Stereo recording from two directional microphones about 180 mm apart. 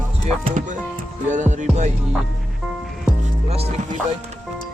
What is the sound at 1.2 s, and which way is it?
Speech, 40° right (ahead or behind).